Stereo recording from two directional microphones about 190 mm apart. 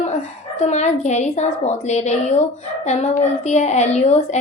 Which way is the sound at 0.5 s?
35° left (ahead or behind).